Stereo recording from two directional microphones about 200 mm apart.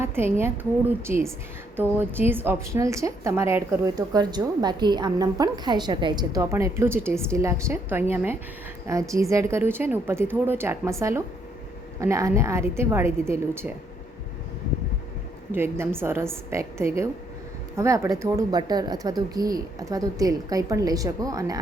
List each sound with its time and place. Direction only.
0.0 s a woman's voice: 10° right (ahead or behind)
15.5 s a woman's voice: 10° right (ahead or behind)